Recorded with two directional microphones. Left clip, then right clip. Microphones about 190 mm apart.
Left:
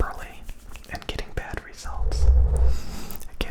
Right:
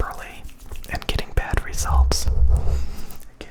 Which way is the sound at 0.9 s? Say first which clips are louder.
Right 6 dB; 15° right (ahead or behind).